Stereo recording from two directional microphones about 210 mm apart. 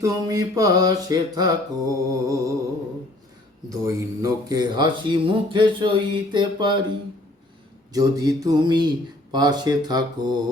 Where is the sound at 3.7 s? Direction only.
15° right (ahead or behind).